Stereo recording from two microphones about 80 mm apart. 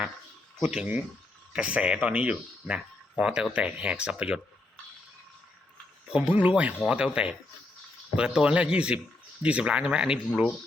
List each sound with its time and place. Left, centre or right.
0.6 s speech: centre
6.1 s speech: centre